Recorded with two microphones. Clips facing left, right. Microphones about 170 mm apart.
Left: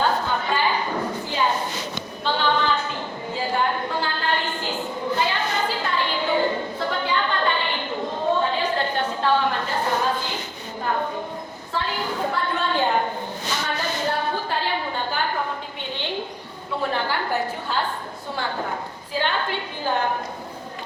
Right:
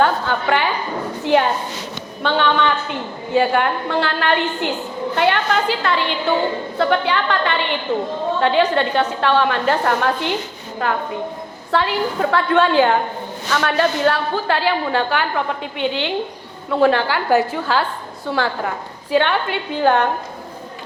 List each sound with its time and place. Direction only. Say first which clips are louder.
0.0 s a sound: right 5 dB; 70° right (ahead or behind)
3.3 s a woman's voice: right 8 dB; 75° right (ahead or behind)
10.8 s a woman's voice: right 4 dB; 90° right
13.5 s a woman's voice: right 10 dB; 75° right (ahead or behind)
19.1 s a woman's voice: right 7 dB; 75° right (ahead or behind)